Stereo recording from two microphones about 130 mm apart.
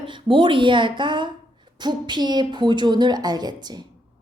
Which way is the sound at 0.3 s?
40° right (ahead or behind).